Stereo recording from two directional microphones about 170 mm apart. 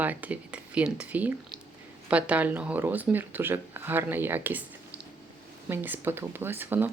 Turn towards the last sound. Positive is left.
turn(degrees=-10)  # may be behind; listen again after turning